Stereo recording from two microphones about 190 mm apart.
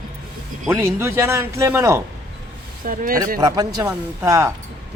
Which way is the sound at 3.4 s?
20° right (ahead or behind).